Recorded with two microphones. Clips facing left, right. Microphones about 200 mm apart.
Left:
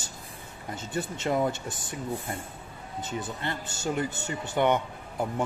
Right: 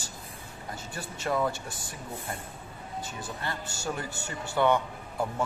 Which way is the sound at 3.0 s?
20° left (ahead or behind).